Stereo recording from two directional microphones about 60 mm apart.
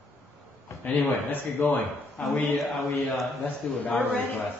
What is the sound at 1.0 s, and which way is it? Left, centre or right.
A man's voice, left.